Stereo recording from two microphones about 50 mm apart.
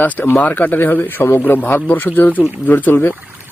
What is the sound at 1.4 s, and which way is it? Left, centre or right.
Speech, left.